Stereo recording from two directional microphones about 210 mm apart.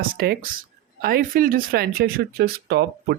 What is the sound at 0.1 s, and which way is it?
Speech, 45° right (ahead or behind).